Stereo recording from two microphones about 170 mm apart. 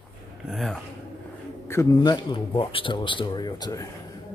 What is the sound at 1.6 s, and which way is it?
Speech, 20° left (ahead or behind).